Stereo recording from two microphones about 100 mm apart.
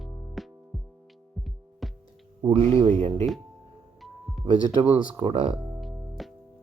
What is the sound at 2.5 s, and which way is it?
Speech, 75° right (ahead or behind).